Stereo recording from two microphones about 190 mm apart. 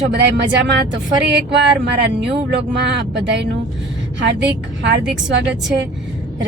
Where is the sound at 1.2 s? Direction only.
65° right (ahead or behind).